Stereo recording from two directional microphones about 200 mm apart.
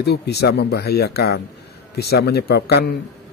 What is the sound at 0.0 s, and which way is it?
A man's voice, 55° left (ahead or behind).